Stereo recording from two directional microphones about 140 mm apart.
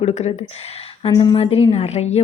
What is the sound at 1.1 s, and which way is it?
Speech, 30° left (ahead or behind).